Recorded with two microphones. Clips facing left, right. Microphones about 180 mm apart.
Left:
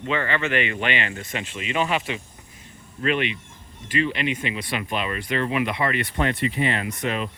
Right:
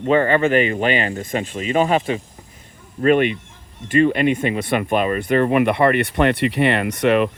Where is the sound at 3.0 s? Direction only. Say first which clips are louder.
Right 9 dB; 45° right (ahead or behind).